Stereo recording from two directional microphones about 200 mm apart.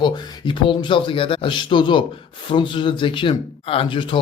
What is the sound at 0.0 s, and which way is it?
Speech, 25° left (ahead or behind).